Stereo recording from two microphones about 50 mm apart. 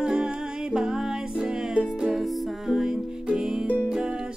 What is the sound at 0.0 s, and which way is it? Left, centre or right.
Music, centre.